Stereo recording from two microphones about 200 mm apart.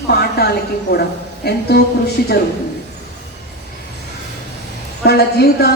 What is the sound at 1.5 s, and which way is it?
Speech, 55° left (ahead or behind).